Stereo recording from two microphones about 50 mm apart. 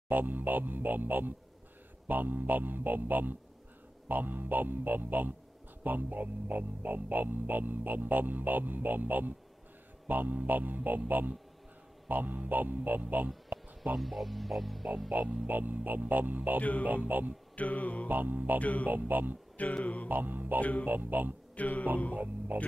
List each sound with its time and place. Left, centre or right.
0.1 s speech: right
13.9 s speech: centre
15.0 s speech: right
17.6 s mantra: left
18.0 s speech: right
18.6 s mantra: left
18.9 s speech: right
19.5 s a sound: left
20.1 s speech: right
21.5 s a sound: left
22.1 s speech: right